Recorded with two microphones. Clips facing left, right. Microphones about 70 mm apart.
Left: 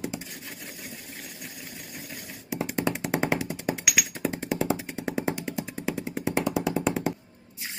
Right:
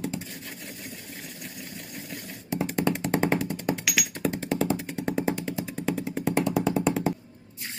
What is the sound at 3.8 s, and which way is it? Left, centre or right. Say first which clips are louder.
Music: even; centre.